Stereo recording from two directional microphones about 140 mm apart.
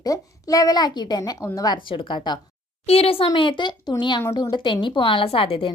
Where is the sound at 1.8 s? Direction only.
35° left (ahead or behind).